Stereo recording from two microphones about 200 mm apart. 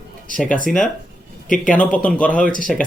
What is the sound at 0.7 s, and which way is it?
Speech, 45° left (ahead or behind).